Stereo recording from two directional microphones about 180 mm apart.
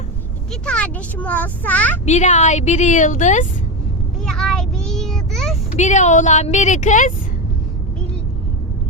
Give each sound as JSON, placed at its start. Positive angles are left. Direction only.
{"t": 0.6, "sound": "a child's voice", "side_deg": 5}
{"t": 2.0, "sound": "a woman's voice", "side_deg": 40}
{"t": 4.3, "sound": "child singing", "side_deg": 0}
{"t": 5.7, "sound": "a woman's voice", "side_deg": 40}